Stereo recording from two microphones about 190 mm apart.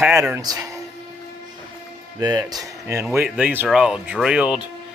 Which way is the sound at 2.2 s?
20° right (ahead or behind).